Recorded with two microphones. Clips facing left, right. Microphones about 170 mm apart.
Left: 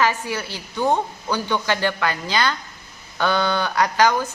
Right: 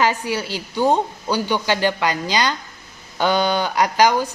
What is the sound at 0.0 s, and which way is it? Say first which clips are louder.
A woman's voice: right 2 dB; 20° right (ahead or behind).